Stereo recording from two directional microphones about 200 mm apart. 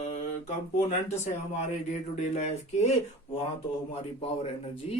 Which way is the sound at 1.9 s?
35° left (ahead or behind).